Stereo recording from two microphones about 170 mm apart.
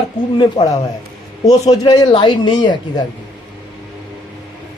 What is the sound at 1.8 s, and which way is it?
Speech, 25° left (ahead or behind).